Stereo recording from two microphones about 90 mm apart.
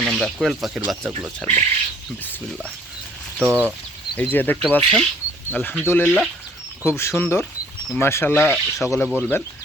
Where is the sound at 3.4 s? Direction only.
25° right (ahead or behind).